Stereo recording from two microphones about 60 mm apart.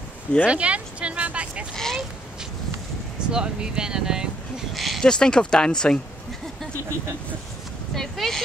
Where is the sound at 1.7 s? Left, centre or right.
Centre.